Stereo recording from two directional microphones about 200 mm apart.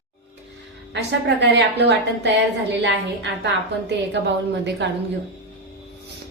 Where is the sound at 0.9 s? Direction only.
60° right (ahead or behind).